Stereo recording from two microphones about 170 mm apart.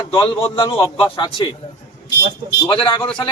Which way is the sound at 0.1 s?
35° left (ahead or behind).